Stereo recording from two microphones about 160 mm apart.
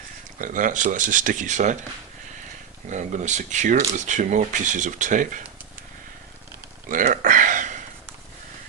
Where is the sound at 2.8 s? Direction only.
50° right (ahead or behind).